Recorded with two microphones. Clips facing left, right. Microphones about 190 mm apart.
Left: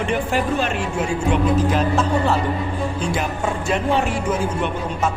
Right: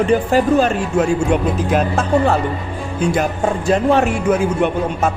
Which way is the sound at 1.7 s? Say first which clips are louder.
Right 3 dB; 50° right (ahead or behind).